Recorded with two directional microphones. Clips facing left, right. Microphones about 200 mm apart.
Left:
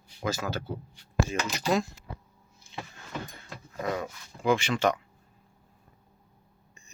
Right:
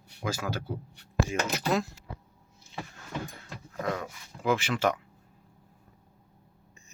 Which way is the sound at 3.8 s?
5° left (ahead or behind).